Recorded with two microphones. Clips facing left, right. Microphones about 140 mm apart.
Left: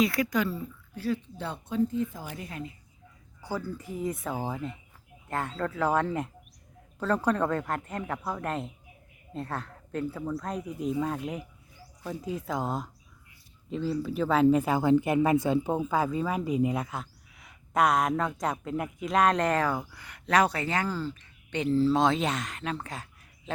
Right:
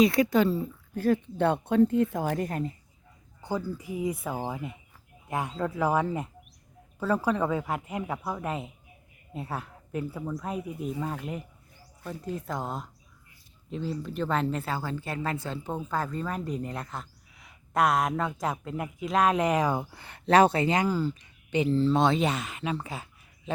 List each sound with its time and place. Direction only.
0.0 s speech: 25° right (ahead or behind)
0.7 s speech: 50° right (ahead or behind)
3.4 s speech: 15° right (ahead or behind)
19.8 s speech: 30° right (ahead or behind); by 23.0 s 5° right (ahead or behind)